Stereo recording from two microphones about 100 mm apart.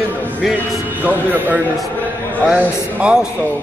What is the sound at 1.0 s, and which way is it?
Speech, 15° right (ahead or behind).